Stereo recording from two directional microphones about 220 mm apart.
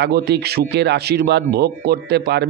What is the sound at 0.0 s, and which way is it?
A man's voice, 50° right (ahead or behind).